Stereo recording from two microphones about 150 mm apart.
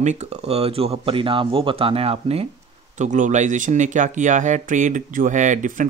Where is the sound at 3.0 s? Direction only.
55° right (ahead or behind).